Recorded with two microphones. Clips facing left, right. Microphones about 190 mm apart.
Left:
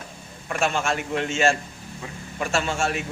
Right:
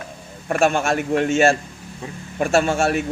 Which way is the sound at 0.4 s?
50° right (ahead or behind).